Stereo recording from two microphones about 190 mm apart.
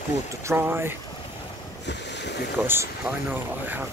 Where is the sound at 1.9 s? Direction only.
65° left (ahead or behind).